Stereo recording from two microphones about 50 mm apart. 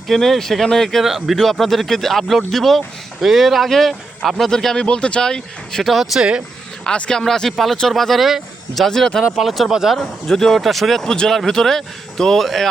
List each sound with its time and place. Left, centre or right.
0.1 s speech: centre
1.0 s speech: centre
1.4 s speech: centre
5.8 s speech: centre
6.1 s speech: centre
6.8 s speech: centre
8.9 s speech: centre
9.4 s speech: centre
10.0 s speech: centre